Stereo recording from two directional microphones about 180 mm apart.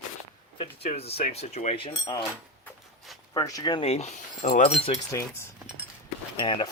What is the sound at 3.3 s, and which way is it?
Speech, 20° left (ahead or behind).